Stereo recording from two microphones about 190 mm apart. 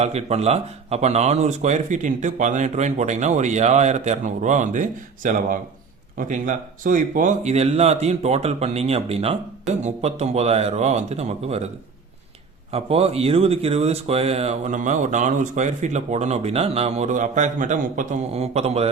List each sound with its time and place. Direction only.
0.0 s speech: 35° right (ahead or behind)
12.7 s speech: 30° right (ahead or behind)